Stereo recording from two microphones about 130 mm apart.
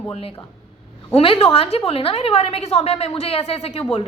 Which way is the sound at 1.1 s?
50° left (ahead or behind).